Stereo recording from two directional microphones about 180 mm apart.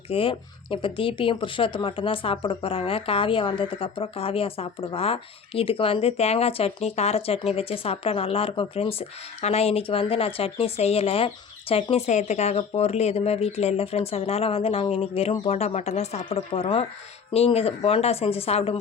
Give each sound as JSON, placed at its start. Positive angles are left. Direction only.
{"t": 0.1, "sound": "speech", "side_deg": 30}